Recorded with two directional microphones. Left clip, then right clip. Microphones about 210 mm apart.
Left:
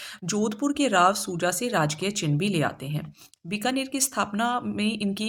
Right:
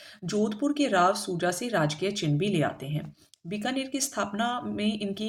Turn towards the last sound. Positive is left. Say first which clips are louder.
# left 2 dB
turn(degrees=30)  # may be behind; listen again after turning